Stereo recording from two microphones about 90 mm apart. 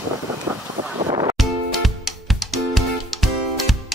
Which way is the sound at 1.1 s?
40° right (ahead or behind).